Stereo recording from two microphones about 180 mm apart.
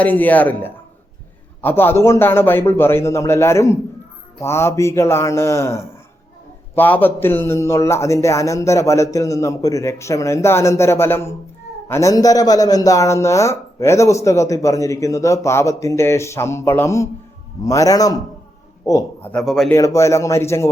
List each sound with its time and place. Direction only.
0.0 s a man's voice: 10° left (ahead or behind)
19.3 s a man's voice: centre (ahead or behind)
19.7 s a man's voice: 15° left (ahead or behind)